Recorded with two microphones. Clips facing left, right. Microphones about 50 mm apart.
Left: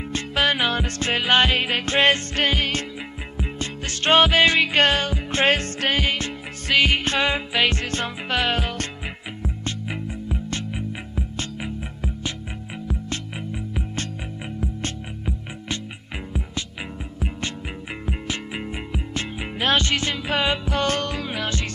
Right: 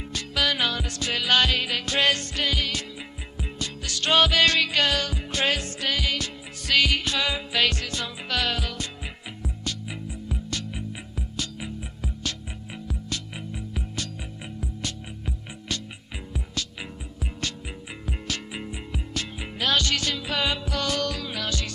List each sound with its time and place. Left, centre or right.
0.1 s music: left
7.1 s music: left
7.5 s speech: left
7.8 s music: left
8.4 s speech: left
9.4 s music: left
18.0 s music: left